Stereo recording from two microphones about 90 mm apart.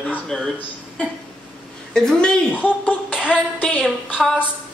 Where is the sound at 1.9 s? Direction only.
5° left (ahead or behind).